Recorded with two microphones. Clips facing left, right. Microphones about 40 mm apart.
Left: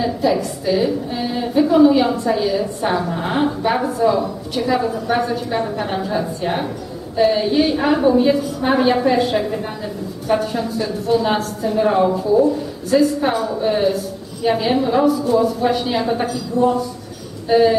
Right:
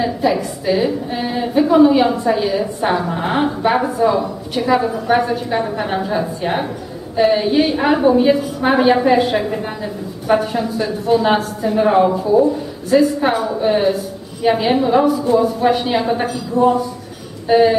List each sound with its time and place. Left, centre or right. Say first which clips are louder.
0.0 s a woman's voice: right 1 dB; centre